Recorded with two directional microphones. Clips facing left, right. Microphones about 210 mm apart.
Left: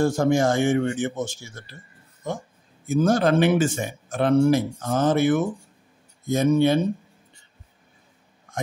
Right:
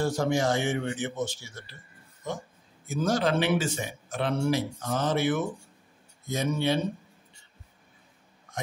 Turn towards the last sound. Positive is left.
turn(degrees=50)  # may be behind; listen again after turning